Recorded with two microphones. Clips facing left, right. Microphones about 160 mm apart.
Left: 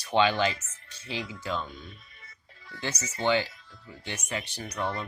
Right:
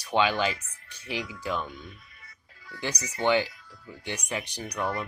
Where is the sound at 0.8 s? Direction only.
15° right (ahead or behind).